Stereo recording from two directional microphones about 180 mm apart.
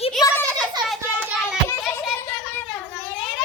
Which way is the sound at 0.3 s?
10° left (ahead or behind).